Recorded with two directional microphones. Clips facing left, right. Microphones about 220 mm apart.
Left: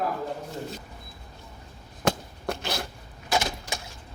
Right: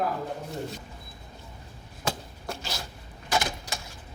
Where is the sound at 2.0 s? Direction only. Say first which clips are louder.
Left 6 dB; 60° left (ahead or behind).